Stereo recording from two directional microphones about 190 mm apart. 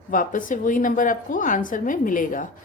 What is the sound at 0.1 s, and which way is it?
A woman's voice, 45° left (ahead or behind).